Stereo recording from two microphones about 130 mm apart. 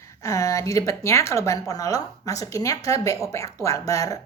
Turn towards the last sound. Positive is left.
turn(degrees=25)  # may be behind; listen again after turning